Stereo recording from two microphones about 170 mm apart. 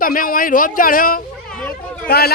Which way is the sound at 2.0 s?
70° left (ahead or behind).